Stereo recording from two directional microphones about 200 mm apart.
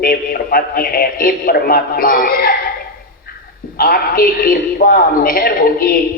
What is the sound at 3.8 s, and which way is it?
Speech, 45° left (ahead or behind).